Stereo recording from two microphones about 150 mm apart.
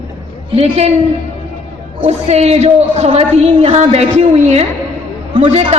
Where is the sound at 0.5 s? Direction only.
45° right (ahead or behind).